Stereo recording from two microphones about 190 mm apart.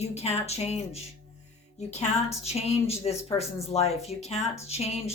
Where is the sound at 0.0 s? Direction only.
35° left (ahead or behind).